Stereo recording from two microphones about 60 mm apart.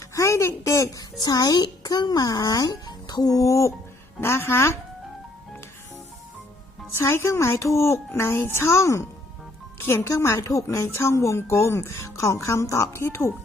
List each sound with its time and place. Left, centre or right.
0.1 s a sound: left
1.8 s a child's voice: left
4.2 s a woman's voice: left
7.3 s a woman's voice: left